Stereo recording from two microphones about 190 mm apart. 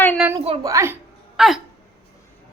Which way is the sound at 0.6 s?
15° right (ahead or behind).